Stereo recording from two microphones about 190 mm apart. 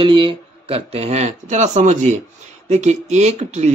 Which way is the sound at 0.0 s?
25° right (ahead or behind).